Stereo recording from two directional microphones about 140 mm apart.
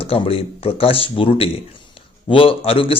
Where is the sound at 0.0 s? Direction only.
40° left (ahead or behind).